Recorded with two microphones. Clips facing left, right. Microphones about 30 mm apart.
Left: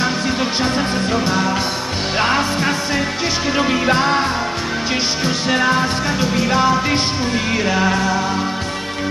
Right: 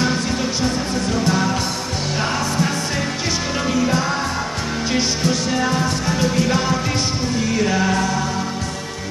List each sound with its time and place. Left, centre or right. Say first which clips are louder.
1.1 s music: even; left
2.1 s music: left 4 dB; left
5.5 s music: left 4 dB; left
6.1 s music: left 1 dB; centre